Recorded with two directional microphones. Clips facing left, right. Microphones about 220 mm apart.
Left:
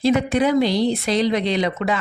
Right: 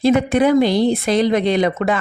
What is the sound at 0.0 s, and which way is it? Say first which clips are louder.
Speech: right 3 dB; 55° right (ahead or behind).